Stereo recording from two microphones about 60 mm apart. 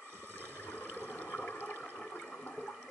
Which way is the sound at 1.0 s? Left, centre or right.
Left.